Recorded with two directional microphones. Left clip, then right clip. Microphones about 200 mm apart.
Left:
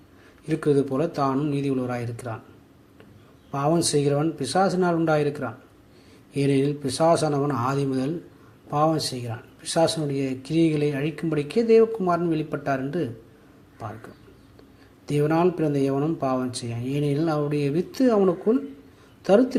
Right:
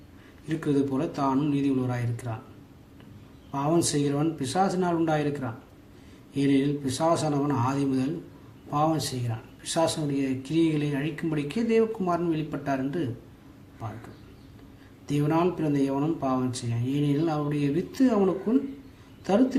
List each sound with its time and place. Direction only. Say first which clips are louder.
0.4 s speech: left 5 dB; 30° left (ahead or behind)
3.5 s speech: left 3 dB; 30° left (ahead or behind)
15.0 s speech: left 4 dB; 30° left (ahead or behind)
19.2 s speech: left 5 dB; 30° left (ahead or behind)